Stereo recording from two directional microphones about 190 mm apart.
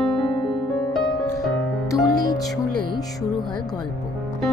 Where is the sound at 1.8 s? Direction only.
15° left (ahead or behind).